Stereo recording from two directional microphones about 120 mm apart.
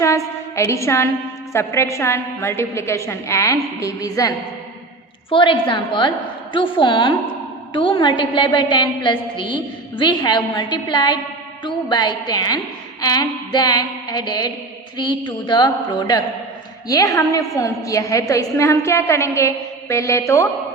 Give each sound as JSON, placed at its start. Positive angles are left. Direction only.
{"t": 0.0, "sound": "a sound", "side_deg": 25}
{"t": 1.5, "sound": "a woman's voice", "side_deg": 20}
{"t": 5.3, "sound": "a woman's voice", "side_deg": 45}